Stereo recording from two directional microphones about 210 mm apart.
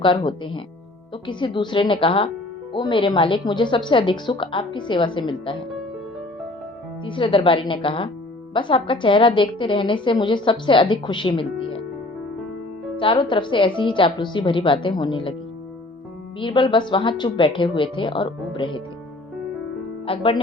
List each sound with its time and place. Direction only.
0.0 s a woman's voice: 25° left (ahead or behind)
7.0 s a woman's voice: 25° left (ahead or behind)
13.0 s a woman's voice: 25° left (ahead or behind)
16.4 s a woman's voice: 25° left (ahead or behind)
20.1 s a woman's voice: 25° left (ahead or behind)